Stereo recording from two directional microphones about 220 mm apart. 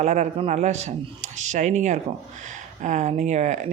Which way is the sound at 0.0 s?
30° right (ahead or behind).